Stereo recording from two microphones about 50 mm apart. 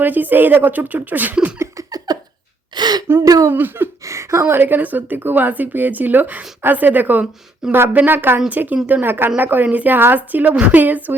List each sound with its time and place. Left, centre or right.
0.0 s speech: right
3.1 s speech: right
4.0 s a sound: right
4.4 s speech: right
7.6 s speech: centre
7.9 s speech: right
8.4 s speech: right